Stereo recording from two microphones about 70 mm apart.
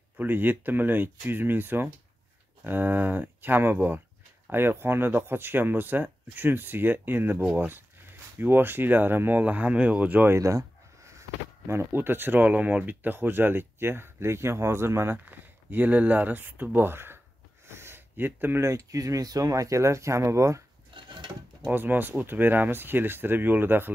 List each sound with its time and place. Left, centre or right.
0.2 s speech: right
10.3 s speech: right
15.2 s speech: right
17.6 s a sound: right
18.6 s speech: right
21.6 s speech: right